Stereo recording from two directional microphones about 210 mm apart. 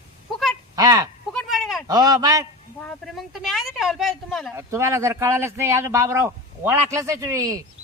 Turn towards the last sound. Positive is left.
turn(degrees=-15)  # may be behind; listen again after turning